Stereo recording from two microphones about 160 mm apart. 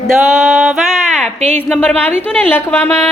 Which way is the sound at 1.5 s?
5° left (ahead or behind).